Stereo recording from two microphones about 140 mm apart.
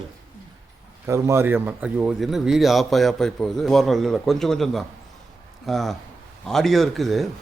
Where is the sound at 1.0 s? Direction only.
20° right (ahead or behind).